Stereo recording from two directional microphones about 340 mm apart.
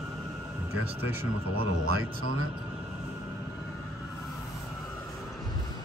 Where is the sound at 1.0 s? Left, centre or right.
Centre.